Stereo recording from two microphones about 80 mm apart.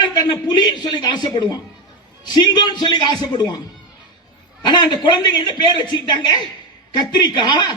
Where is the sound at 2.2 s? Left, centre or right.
Left.